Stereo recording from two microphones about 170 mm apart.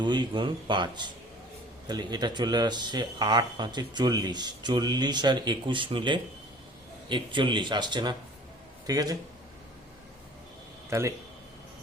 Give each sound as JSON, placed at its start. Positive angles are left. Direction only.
{"t": 0.0, "sound": "speech", "side_deg": -25}
{"t": 10.8, "sound": "a man's voice", "side_deg": -15}